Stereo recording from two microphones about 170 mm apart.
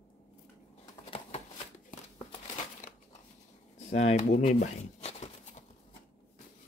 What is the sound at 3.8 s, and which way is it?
Shuffling cards, 40° left (ahead or behind).